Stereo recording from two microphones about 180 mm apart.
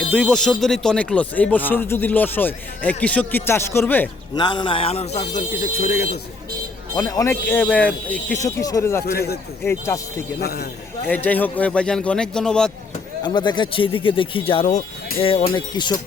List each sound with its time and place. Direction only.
0.1 s speech: 5° left (ahead or behind)
4.4 s speech: 25° left (ahead or behind); by 6.1 s 55° left (ahead or behind)
6.9 s speech: 15° left (ahead or behind)
8.4 s speech: 20° left (ahead or behind)
9.1 s a man's voice: 60° left (ahead or behind)
9.6 s speech: 15° left (ahead or behind)
10.4 s a man's voice: 60° left (ahead or behind)
11.1 s a man's voice: 10° left (ahead or behind)
13.2 s speech: 25° left (ahead or behind); by 15.3 s 40° left (ahead or behind)
15.5 s speech: 25° left (ahead or behind)